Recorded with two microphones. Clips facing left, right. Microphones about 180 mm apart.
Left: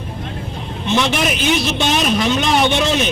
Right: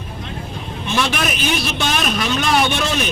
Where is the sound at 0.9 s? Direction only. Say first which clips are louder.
Left 3 dB; 20° left (ahead or behind).